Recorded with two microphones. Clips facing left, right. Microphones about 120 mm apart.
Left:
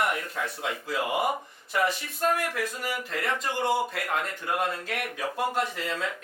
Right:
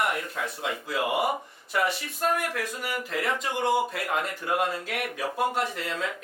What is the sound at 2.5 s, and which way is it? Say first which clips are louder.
Speech: even; centre (ahead or behind).